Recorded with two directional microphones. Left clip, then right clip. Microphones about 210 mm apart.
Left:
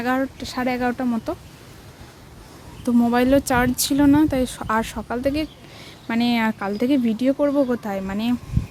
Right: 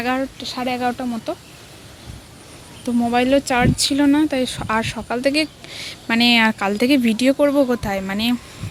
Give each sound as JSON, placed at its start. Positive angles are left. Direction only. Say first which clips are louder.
{"t": 0.0, "sound": "speech", "louder": "right 1 dB", "side_deg": 10}
{"t": 2.8, "sound": "speech", "louder": "right 1 dB", "side_deg": 15}